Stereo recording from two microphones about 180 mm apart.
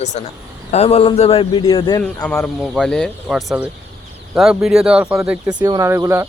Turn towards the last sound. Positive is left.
turn(degrees=-15)  # may be behind; listen again after turning